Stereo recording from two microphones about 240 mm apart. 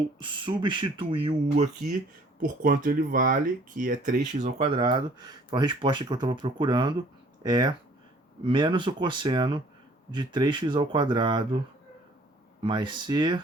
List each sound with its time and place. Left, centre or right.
0.2 s speech: centre
2.4 s speech: right; by 11.6 s centre
12.6 s speech: centre